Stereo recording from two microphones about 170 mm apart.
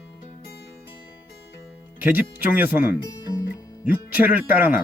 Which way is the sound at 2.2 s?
10° right (ahead or behind).